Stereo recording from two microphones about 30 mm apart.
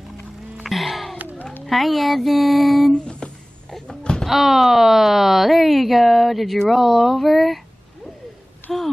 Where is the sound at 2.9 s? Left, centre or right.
Left.